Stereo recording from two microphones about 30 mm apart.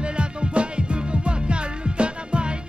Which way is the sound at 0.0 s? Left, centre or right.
Right.